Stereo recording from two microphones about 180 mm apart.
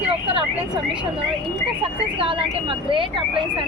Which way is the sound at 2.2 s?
30° right (ahead or behind).